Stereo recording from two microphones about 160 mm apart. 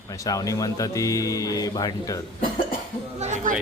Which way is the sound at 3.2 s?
50° right (ahead or behind).